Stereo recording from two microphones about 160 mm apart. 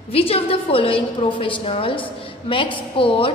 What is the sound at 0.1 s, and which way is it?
A woman's voice, 35° left (ahead or behind).